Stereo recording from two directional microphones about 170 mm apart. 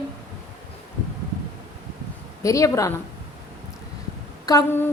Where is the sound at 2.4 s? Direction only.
20° left (ahead or behind).